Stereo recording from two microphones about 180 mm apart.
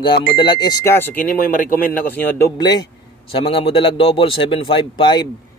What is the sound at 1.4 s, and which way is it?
Speech, 50° left (ahead or behind).